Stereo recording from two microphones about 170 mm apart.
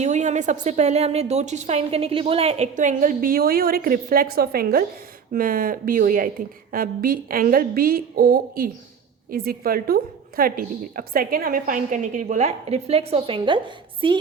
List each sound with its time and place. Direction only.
0.0 s a woman's voice: 45° right (ahead or behind)